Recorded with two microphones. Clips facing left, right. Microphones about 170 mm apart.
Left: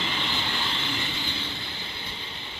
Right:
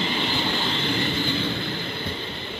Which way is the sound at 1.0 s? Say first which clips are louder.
Right 10 dB; 50° right (ahead or behind).